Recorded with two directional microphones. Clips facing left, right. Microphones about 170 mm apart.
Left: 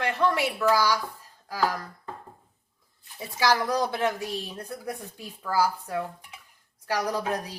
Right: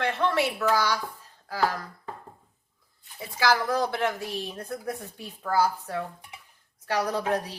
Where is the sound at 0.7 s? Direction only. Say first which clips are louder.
Left 2 dB; 10° left (ahead or behind).